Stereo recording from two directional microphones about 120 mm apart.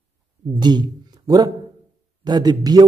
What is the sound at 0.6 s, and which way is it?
Speech, 35° right (ahead or behind).